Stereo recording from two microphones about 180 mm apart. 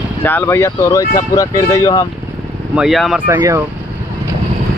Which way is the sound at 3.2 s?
15° right (ahead or behind).